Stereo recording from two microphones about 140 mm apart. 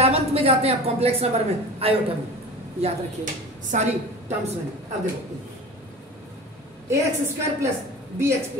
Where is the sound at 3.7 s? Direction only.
60° right (ahead or behind).